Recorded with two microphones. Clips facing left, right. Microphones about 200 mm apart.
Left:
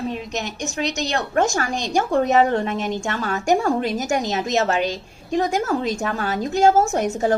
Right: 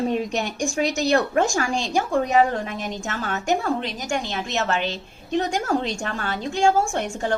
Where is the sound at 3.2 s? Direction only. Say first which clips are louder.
Left 4 dB; 45° left (ahead or behind).